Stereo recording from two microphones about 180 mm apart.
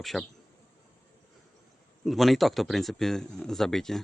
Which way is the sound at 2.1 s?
Centre (ahead or behind).